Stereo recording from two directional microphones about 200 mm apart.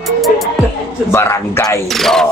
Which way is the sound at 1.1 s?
15° left (ahead or behind).